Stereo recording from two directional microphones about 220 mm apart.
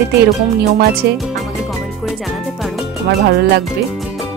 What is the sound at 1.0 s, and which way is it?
Speech, 45° right (ahead or behind).